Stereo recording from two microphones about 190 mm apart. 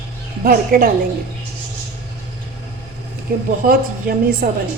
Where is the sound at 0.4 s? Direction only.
50° right (ahead or behind).